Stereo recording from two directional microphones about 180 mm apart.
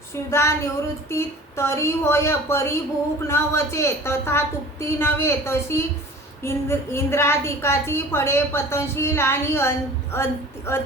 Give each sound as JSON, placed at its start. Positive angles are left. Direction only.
{"t": 0.3, "sound": "a woman's voice", "side_deg": 15}